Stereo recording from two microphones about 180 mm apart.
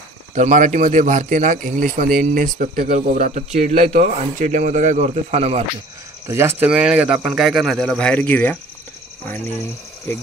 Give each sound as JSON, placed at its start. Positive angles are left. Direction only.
{"t": 0.3, "sound": "speech", "side_deg": -45}
{"t": 6.2, "sound": "speech", "side_deg": -15}